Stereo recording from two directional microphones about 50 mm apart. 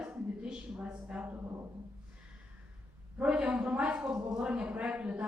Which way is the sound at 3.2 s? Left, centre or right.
Centre.